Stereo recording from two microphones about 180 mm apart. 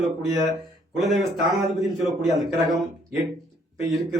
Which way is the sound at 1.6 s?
Centre (ahead or behind).